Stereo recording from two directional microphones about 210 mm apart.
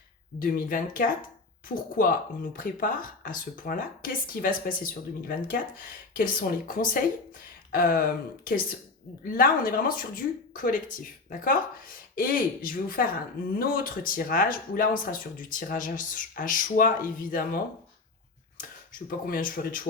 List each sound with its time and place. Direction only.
0.3 s speech: 45° left (ahead or behind)